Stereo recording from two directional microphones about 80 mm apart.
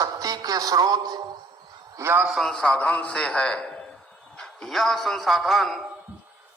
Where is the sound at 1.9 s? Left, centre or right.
Right.